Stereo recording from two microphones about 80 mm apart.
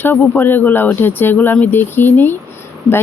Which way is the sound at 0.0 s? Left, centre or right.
Left.